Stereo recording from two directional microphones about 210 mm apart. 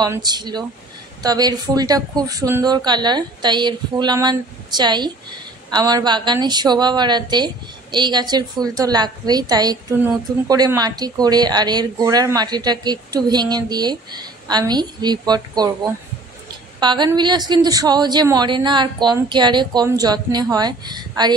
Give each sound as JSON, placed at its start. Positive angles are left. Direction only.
{"t": 0.0, "sound": "speech", "side_deg": -20}